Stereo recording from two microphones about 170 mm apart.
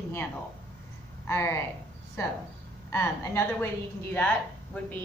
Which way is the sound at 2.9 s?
15° left (ahead or behind).